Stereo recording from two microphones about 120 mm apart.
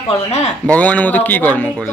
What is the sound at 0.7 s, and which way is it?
Speech, 10° left (ahead or behind).